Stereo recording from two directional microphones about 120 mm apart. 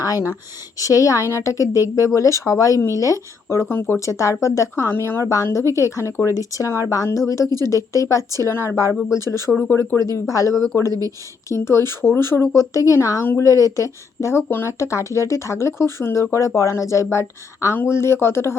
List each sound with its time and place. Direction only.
0.0 s speech: 25° left (ahead or behind)
9.2 s speech: 30° right (ahead or behind)
9.5 s speech: 20° left (ahead or behind)